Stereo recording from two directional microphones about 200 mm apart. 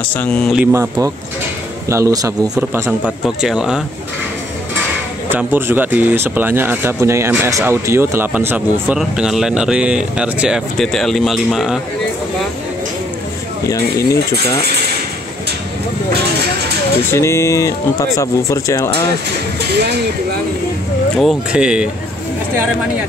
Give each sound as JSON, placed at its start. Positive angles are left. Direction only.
{"t": 0.2, "sound": "speech", "side_deg": 5}
{"t": 0.6, "sound": "speech", "side_deg": -15}
{"t": 5.3, "sound": "speech", "side_deg": -10}
{"t": 13.7, "sound": "speech", "side_deg": 15}
{"t": 17.1, "sound": "speech", "side_deg": 15}
{"t": 21.2, "sound": "speech", "side_deg": 0}